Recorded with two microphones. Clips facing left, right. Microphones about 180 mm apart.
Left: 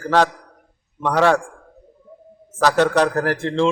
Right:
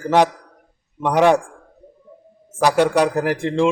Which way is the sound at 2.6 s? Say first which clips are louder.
Right 1 dB; 10° right (ahead or behind).